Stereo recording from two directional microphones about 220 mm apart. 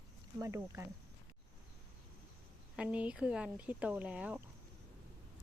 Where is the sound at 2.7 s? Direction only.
5° right (ahead or behind).